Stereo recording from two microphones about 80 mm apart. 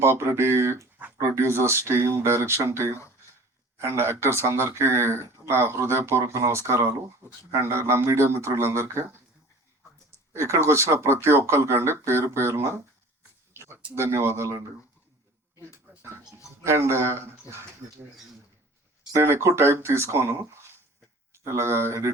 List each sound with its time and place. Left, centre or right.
0.0 s speech: right
7.8 s speech: right
10.3 s speech: right
13.5 s a sound: right
13.9 s speech: right
16.6 s speech: right
19.1 s speech: right